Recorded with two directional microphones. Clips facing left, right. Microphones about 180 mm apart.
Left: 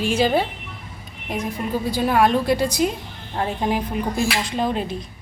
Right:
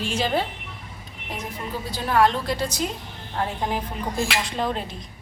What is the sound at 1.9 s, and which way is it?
Speech, 15° left (ahead or behind).